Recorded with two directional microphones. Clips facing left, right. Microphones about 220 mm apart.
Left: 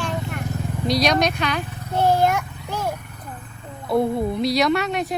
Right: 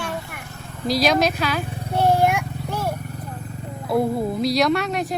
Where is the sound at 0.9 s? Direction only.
Centre (ahead or behind).